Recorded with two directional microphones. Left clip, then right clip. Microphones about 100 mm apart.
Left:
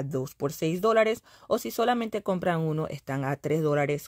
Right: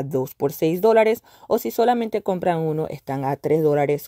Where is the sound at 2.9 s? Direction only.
10° right (ahead or behind).